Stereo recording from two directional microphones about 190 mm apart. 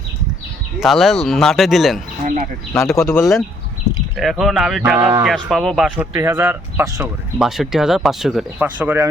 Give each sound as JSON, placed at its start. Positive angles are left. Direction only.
{"t": 0.8, "sound": "speech", "side_deg": 0}
{"t": 2.2, "sound": "speech", "side_deg": -40}
{"t": 2.9, "sound": "speech", "side_deg": 15}
{"t": 3.2, "sound": "speech", "side_deg": 0}
{"t": 4.9, "sound": "speech", "side_deg": -15}
{"t": 5.5, "sound": "speech", "side_deg": 0}
{"t": 6.1, "sound": "speech", "side_deg": -15}
{"t": 7.3, "sound": "speech", "side_deg": 0}